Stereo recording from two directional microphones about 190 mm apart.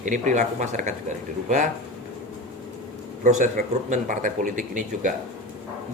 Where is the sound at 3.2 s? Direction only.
40° right (ahead or behind).